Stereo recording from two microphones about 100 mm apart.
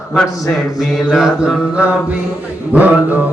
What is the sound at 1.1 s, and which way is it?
Mantra, 5° right (ahead or behind).